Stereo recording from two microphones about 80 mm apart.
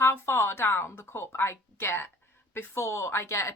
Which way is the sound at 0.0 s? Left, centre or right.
Left.